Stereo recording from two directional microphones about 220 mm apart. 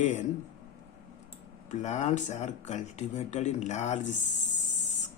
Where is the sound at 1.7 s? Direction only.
35° left (ahead or behind).